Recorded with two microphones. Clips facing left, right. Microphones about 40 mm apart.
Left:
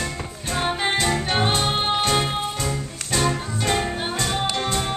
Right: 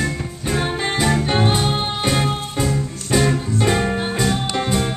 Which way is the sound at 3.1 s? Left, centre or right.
Centre.